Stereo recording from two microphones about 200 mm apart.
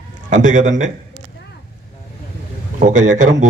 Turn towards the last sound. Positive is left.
turn(degrees=-40)  # may be behind; listen again after turning